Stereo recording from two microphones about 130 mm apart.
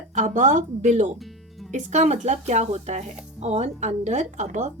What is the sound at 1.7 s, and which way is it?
A woman's voice, 65° right (ahead or behind).